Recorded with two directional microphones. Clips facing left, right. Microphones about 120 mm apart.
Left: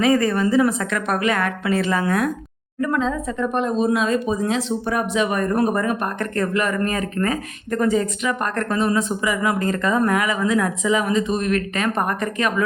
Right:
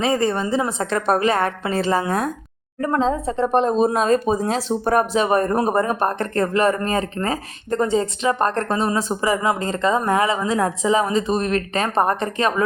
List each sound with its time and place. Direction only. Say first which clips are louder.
0.0 s speech: left 2 dB; 30° right (ahead or behind)